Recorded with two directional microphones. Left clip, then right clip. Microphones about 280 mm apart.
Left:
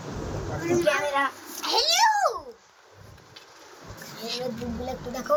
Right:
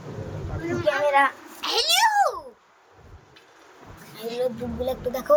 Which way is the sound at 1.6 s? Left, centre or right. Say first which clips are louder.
Right 1 dB; centre.